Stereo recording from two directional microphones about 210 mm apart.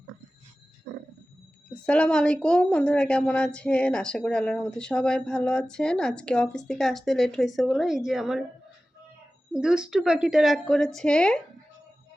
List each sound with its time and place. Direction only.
0.9 s wild animals: 50° right (ahead or behind)
1.9 s a woman's voice: 5° left (ahead or behind)
9.5 s a woman's voice: 5° right (ahead or behind)